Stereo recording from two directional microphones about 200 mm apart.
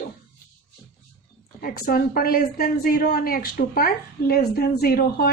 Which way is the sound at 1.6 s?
45° left (ahead or behind).